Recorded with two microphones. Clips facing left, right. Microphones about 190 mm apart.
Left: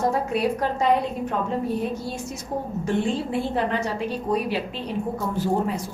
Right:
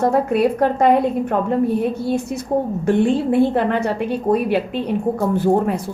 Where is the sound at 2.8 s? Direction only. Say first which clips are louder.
Right 7 dB; 60° right (ahead or behind).